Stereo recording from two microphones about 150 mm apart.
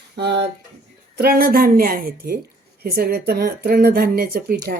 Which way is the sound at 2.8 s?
90° right.